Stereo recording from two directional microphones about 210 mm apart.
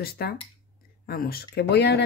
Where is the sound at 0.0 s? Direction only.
45° left (ahead or behind).